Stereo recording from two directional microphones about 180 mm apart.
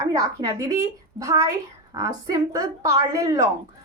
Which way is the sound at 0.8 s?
20° right (ahead or behind).